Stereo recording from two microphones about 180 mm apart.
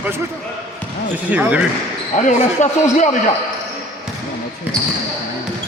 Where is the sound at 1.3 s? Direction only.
10° right (ahead or behind).